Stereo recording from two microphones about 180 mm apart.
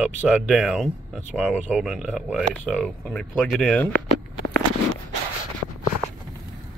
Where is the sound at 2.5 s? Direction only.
5° left (ahead or behind).